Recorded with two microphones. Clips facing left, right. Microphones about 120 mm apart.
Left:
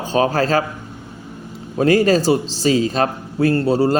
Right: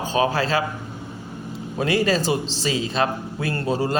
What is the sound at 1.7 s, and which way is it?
A man's voice, 40° left (ahead or behind).